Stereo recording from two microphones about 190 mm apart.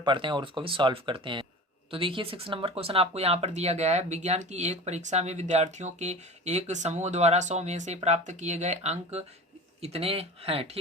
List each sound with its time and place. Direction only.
0.0 s speech: 25° right (ahead or behind)